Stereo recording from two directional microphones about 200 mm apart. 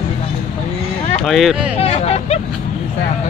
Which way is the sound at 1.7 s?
30° left (ahead or behind).